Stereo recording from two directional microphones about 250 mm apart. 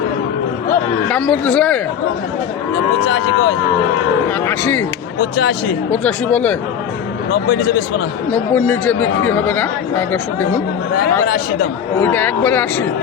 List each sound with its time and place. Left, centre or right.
1.0 s speech: centre
3.1 s speech: left
4.4 s speech: centre
5.9 s speech: centre
7.3 s speech: left
8.3 s speech: centre
11.9 s speech: centre